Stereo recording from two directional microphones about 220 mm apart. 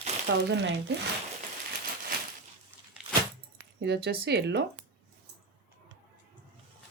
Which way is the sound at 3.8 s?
45° right (ahead or behind).